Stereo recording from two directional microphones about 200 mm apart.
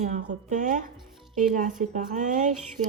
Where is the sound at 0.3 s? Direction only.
40° right (ahead or behind).